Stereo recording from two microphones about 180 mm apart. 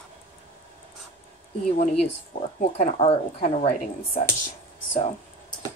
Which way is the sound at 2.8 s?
35° left (ahead or behind).